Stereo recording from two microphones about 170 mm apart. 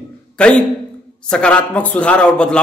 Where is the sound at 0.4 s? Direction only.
5° left (ahead or behind).